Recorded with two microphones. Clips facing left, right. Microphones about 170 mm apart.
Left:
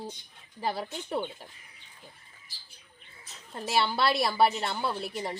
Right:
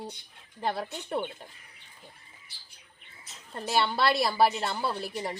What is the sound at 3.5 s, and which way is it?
Speech, centre (ahead or behind).